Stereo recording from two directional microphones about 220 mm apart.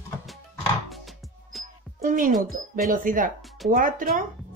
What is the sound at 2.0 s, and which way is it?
A woman's voice, 40° right (ahead or behind).